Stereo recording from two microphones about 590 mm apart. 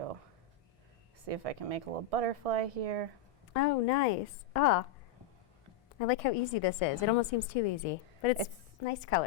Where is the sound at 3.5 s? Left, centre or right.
Left.